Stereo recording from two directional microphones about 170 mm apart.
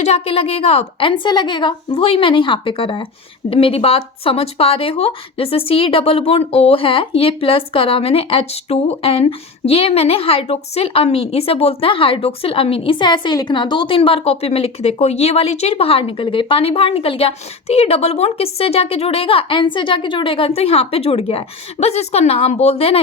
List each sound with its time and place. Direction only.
0.0 s speech: 35° left (ahead or behind)